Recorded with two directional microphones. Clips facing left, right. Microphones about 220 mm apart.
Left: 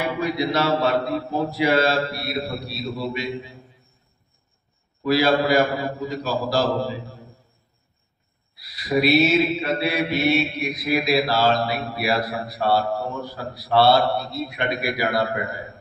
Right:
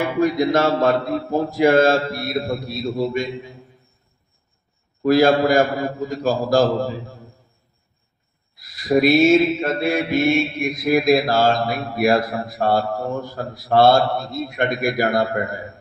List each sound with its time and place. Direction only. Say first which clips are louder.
0.0 s mantra: right 5 dB; 45° right (ahead or behind)
5.0 s mantra: right 4 dB; 50° right (ahead or behind)
8.5 s mantra: right 4 dB; 45° right (ahead or behind)